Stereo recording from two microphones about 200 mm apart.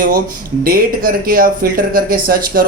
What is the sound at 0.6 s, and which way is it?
Speech, 45° right (ahead or behind).